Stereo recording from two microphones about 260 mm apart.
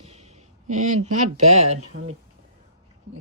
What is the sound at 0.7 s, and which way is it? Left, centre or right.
Speech, right.